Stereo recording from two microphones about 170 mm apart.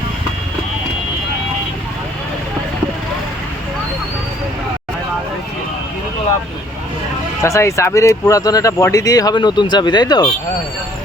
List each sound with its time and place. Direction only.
7.4 s speech: 15° left (ahead or behind)